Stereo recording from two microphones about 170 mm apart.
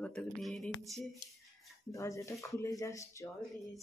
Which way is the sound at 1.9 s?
20° left (ahead or behind).